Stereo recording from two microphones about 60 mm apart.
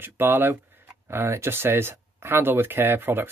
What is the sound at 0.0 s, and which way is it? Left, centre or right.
Speech, right.